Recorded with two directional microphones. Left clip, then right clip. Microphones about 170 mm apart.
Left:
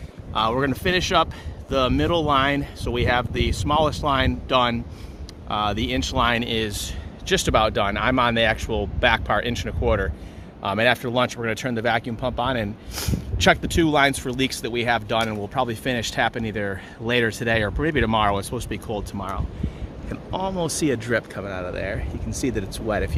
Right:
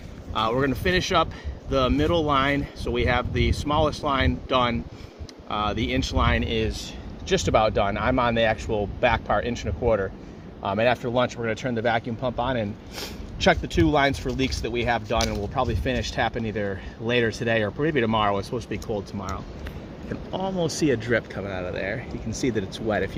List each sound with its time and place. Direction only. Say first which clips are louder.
0.3 s speech: left 2 dB; 30° left (ahead or behind)